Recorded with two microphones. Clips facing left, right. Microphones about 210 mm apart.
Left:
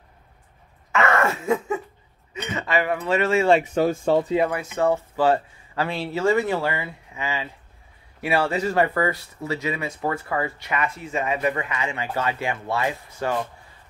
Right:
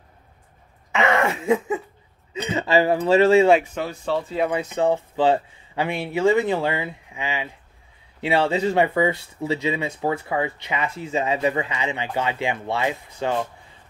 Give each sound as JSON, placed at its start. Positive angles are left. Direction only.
{"t": 0.9, "sound": "cough", "side_deg": -15}
{"t": 2.4, "sound": "speech", "side_deg": -30}
{"t": 3.7, "sound": "speech", "side_deg": 45}
{"t": 4.7, "sound": "speech", "side_deg": -15}